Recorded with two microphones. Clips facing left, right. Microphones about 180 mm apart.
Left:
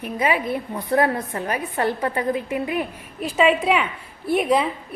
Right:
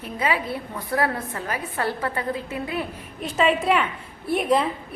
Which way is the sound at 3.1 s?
5° left (ahead or behind).